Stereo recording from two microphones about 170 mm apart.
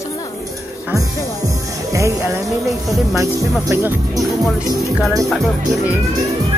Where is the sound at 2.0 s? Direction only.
15° right (ahead or behind).